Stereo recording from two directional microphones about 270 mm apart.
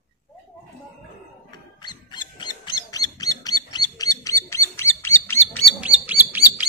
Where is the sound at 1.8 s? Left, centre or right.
Centre.